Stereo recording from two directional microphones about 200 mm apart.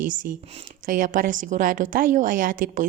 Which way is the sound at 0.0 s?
40° right (ahead or behind).